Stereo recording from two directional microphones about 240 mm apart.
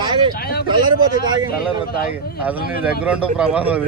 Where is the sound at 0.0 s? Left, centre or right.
Centre.